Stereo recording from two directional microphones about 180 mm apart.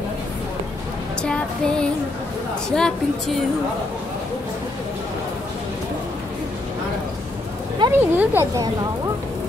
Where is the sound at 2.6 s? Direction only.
5° left (ahead or behind).